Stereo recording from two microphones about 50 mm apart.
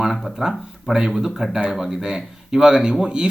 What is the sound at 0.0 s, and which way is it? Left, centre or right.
Speech, centre.